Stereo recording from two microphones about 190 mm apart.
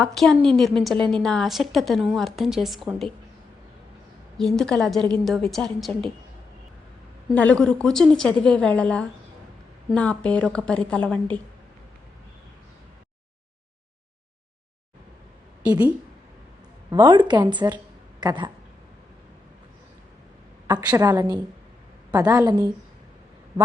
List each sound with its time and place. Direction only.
0.0 s a woman's voice: centre (ahead or behind)
4.4 s a woman's voice: 5° left (ahead or behind)
7.3 s a woman's voice: 5° left (ahead or behind)
15.7 s a woman's voice: 10° right (ahead or behind)
16.9 s speech: 25° right (ahead or behind)
20.7 s speech: 20° right (ahead or behind)